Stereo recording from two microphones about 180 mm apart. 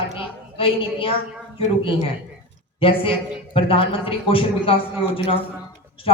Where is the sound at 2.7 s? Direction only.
30° left (ahead or behind).